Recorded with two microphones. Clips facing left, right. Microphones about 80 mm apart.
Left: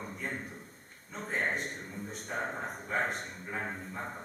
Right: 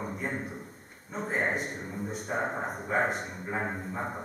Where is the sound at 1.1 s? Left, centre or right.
Centre.